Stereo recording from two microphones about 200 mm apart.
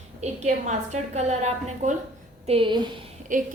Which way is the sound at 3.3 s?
40° right (ahead or behind).